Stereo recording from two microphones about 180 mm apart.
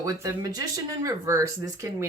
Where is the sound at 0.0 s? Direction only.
20° right (ahead or behind).